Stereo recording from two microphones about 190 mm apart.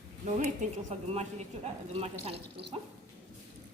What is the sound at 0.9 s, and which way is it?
A woman's voice, 35° right (ahead or behind).